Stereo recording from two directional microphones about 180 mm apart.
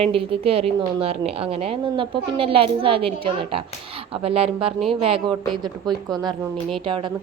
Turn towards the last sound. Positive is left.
turn(degrees=-30)  # may be behind; listen again after turning